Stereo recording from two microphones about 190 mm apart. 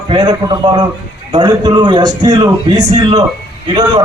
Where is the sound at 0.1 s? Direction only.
20° right (ahead or behind).